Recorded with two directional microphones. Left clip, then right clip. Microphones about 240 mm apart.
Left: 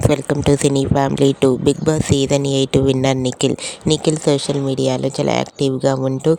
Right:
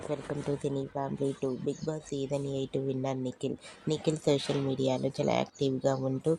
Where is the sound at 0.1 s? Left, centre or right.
Left.